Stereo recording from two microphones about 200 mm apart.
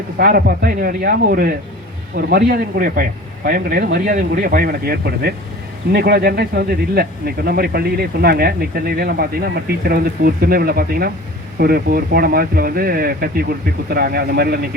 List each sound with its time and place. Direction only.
0.2 s speech: 50° right (ahead or behind)